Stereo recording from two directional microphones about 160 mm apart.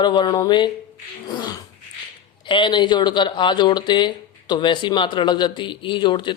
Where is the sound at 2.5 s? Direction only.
30° left (ahead or behind).